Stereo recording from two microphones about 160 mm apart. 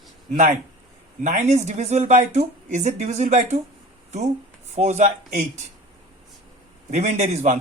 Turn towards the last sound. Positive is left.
turn(degrees=-45)  # may be behind; listen again after turning